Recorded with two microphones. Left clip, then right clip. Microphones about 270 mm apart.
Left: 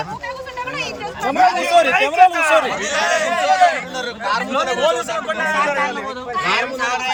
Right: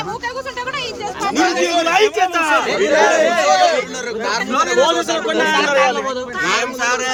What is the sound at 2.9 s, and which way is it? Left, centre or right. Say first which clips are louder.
Speech: right 8 dB; right.